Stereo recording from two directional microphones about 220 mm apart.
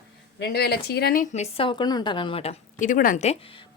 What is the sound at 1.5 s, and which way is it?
A woman's voice, 25° left (ahead or behind).